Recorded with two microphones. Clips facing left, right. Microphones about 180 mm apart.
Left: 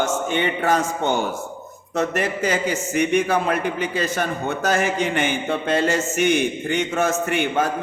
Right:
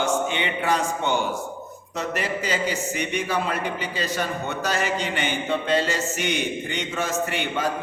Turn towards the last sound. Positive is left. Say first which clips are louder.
# left 5 dB
turn(degrees=50)  # may be behind; listen again after turning